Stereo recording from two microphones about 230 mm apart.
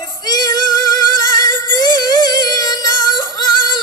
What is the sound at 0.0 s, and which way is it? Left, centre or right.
Female singing, centre.